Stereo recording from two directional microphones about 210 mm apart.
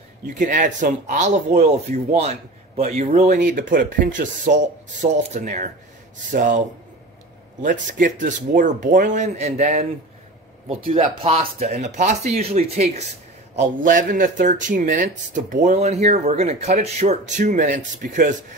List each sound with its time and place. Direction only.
0.3 s speech: 40° right (ahead or behind)
7.6 s speech: 40° right (ahead or behind)